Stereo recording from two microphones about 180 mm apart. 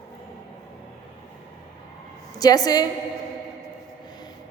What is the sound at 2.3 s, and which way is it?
Speech, 20° left (ahead or behind).